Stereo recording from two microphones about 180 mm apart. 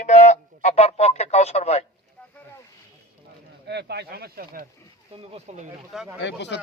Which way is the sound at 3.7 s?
65° right (ahead or behind).